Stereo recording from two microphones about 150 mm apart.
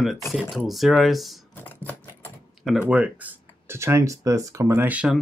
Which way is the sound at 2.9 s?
10° right (ahead or behind).